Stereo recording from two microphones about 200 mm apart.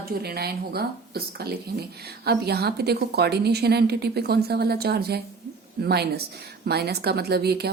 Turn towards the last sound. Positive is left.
turn(degrees=-55)  # may be behind; listen again after turning